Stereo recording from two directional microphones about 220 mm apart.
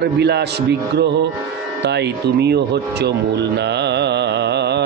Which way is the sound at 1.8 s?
50° right (ahead or behind).